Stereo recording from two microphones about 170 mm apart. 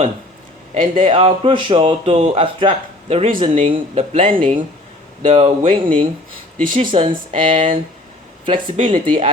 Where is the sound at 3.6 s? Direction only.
35° right (ahead or behind).